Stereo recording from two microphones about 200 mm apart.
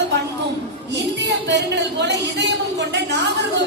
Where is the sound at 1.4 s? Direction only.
60° right (ahead or behind).